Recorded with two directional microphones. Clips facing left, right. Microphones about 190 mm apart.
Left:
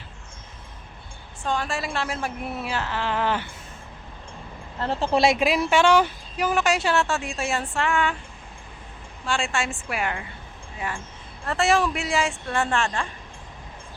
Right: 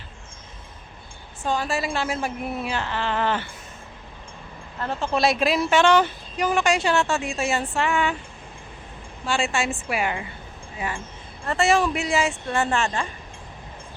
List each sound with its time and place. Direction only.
1.5 s speech: 5° right (ahead or behind)
4.8 s speech: 30° left (ahead or behind)
5.4 s speech: 15° left (ahead or behind); by 8.1 s 5° right (ahead or behind)
9.2 s a woman's voice: 5° right (ahead or behind)
11.4 s speech: centre (ahead or behind)